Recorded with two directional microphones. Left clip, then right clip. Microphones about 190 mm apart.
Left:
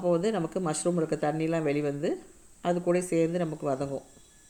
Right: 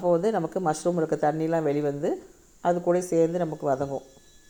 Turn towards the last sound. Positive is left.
turn(degrees=10)  # may be behind; listen again after turning